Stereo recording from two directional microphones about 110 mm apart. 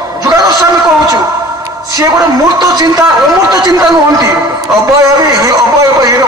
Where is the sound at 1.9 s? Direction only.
35° right (ahead or behind).